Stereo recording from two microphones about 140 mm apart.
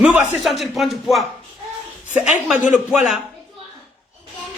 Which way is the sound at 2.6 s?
5° right (ahead or behind).